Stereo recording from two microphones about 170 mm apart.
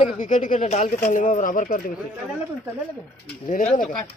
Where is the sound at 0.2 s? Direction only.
45° left (ahead or behind).